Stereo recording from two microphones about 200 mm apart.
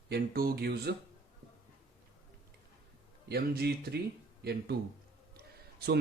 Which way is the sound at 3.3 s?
50° right (ahead or behind).